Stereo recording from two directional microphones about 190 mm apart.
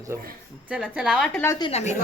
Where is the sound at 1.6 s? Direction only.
35° left (ahead or behind).